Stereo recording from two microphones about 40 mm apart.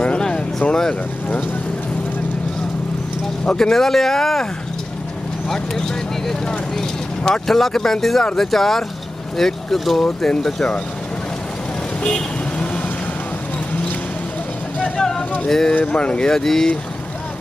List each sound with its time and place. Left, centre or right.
0.0 s a sound: left
3.4 s speech: left
3.7 s speech: centre
6.4 s vehicle: centre
8.4 s speech: centre
12.1 s vehicle: left
15.0 s vehicle: centre
15.4 s speech: centre
15.8 s speech: left